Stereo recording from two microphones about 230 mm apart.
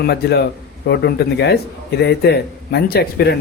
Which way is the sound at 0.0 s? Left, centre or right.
Left.